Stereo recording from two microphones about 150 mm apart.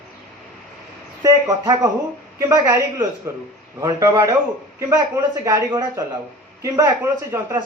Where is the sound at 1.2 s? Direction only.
25° right (ahead or behind).